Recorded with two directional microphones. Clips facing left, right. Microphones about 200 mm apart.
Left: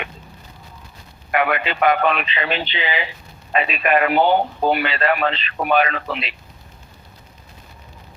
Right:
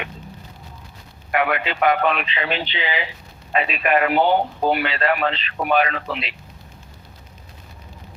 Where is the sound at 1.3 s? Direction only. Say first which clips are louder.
Left 1 dB; 70° left (ahead or behind).